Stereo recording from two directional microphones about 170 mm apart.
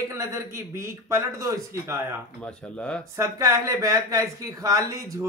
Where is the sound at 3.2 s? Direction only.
20° right (ahead or behind).